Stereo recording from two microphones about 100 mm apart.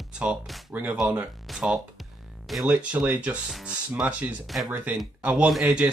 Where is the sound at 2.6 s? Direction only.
15° right (ahead or behind).